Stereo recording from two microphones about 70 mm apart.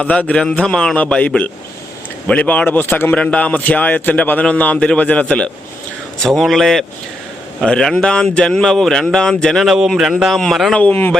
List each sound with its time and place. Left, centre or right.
0.0 s a man's voice: centre
2.6 s a man's voice: left
3.2 s a man's voice: centre
6.1 s speech: centre
9.6 s speech: centre